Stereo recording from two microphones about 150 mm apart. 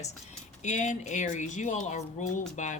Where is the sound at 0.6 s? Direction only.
50° left (ahead or behind).